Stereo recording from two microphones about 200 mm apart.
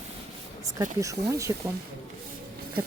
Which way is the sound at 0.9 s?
15° right (ahead or behind).